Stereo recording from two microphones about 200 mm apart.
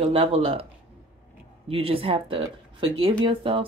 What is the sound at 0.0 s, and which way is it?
Speech, 25° right (ahead or behind).